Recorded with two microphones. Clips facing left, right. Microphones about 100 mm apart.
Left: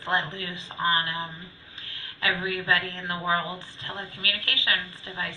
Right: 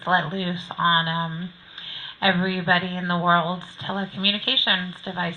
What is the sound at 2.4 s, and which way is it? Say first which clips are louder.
A woman's voice: right 4 dB; 15° right (ahead or behind).